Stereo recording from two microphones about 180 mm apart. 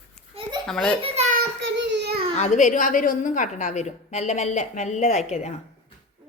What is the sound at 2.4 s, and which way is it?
A woman's voice, 45° left (ahead or behind).